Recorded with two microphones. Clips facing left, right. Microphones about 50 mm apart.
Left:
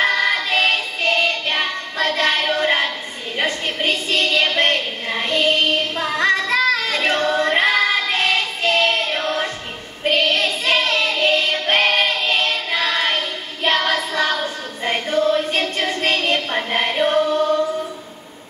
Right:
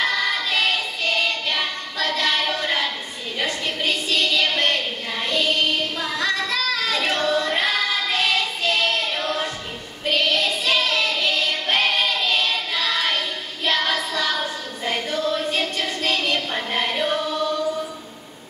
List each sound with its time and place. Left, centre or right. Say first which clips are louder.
0.0 s music: left 4 dB; left
3.3 s a sound: left 3 dB; left
10.0 s child singing: left 3 dB; left
16.9 s choir: left 6 dB; left